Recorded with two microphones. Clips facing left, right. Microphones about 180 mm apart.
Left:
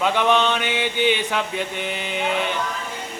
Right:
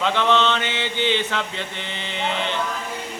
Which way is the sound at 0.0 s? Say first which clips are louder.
Left 1 dB; 15° left (ahead or behind).